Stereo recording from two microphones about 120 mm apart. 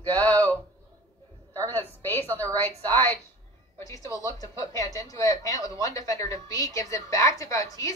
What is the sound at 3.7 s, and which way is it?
A woman's voice, 25° left (ahead or behind).